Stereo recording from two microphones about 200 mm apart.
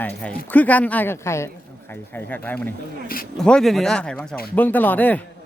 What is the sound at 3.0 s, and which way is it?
Speech, 45° left (ahead or behind).